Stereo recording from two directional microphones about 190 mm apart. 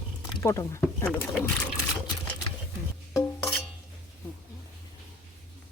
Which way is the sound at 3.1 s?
5° left (ahead or behind).